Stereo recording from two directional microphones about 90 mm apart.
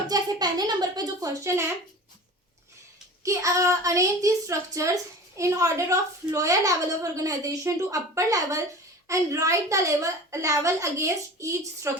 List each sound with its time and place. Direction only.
0.1 s speech: 50° right (ahead or behind); by 1.7 s 30° right (ahead or behind)
3.2 s a woman's voice: 35° right (ahead or behind)